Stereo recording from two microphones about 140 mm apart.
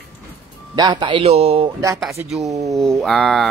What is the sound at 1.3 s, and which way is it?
Speech, 45° right (ahead or behind).